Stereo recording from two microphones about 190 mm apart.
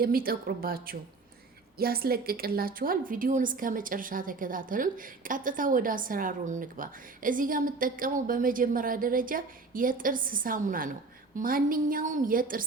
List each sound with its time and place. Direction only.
0.0 s a woman's voice: 50° right (ahead or behind)